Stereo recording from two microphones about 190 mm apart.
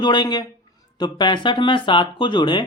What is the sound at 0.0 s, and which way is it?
Speech, 20° left (ahead or behind).